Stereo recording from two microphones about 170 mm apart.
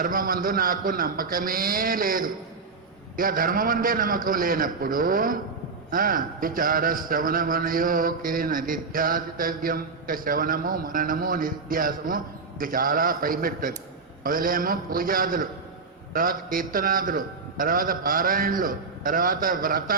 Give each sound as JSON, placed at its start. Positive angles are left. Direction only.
{"t": 0.0, "sound": "a man's voice", "side_deg": -55}